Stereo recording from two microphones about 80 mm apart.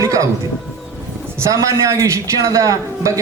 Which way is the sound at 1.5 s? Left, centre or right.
Right.